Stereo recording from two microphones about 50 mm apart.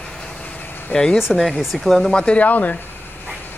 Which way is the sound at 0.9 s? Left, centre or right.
Left.